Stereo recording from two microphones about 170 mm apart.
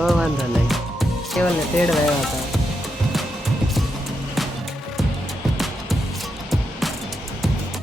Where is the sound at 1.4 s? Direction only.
5° left (ahead or behind).